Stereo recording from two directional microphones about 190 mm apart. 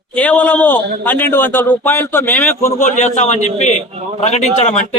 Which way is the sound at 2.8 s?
40° left (ahead or behind).